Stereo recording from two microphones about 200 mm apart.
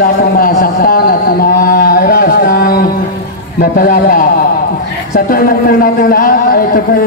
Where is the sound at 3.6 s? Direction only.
45° left (ahead or behind).